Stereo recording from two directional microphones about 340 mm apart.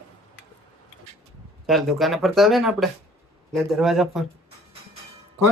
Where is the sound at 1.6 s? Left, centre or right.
Centre.